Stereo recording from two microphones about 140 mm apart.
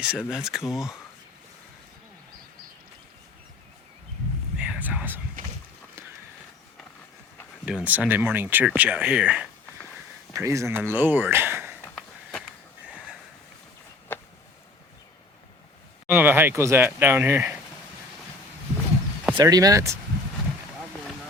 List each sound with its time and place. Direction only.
0.0 s speech: 5° right (ahead or behind)
4.5 s whispering: 10° right (ahead or behind)
7.6 s speech: 5° right (ahead or behind)
10.3 s speech: 20° right (ahead or behind)
14.1 s a sound: 15° left (ahead or behind)
16.0 s speech: 15° right (ahead or behind)
19.3 s speech: 30° right (ahead or behind)